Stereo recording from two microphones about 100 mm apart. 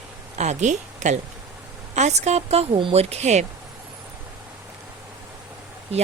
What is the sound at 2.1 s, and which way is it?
Speech, 90° right.